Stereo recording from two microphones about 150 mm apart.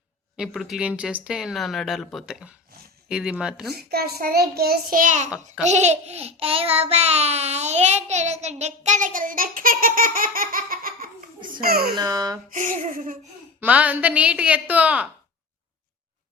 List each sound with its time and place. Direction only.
0.3 s speech: 5° right (ahead or behind)
3.7 s a child's voice: 90° right; by 11.1 s 70° right (ahead or behind)
11.3 s a sound: 30° right (ahead or behind)
11.6 s a child's voice: 90° right
11.9 s a child's voice: 25° right (ahead or behind)
12.5 s a sound: 60° right (ahead or behind)
13.6 s a woman's voice: 10° right (ahead or behind)